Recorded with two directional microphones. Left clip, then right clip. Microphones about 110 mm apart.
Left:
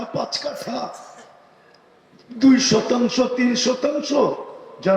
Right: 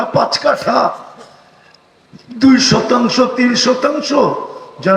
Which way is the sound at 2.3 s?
30° right (ahead or behind).